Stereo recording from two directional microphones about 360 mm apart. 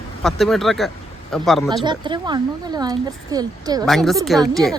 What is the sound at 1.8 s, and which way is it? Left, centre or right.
Speech, centre.